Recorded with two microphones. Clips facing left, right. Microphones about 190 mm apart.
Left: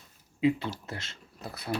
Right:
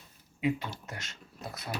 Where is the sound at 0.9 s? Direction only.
30° left (ahead or behind).